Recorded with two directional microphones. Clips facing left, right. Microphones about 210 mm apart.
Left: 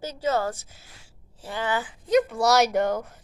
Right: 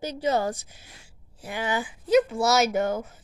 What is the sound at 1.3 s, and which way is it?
Speech, 10° right (ahead or behind).